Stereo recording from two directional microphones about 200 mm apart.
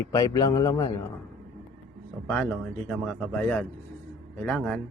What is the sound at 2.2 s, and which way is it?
A man's voice, 5° left (ahead or behind).